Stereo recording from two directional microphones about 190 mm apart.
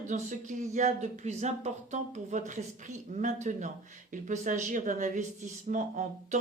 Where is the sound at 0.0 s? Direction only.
40° right (ahead or behind).